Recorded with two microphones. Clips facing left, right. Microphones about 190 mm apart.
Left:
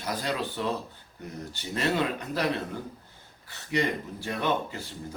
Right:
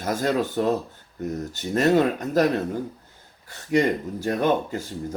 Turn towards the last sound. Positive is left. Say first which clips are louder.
# right 6 dB
turn(degrees=-45)  # may be behind; listen again after turning